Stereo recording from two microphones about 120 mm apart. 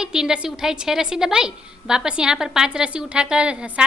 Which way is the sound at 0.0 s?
5° right (ahead or behind).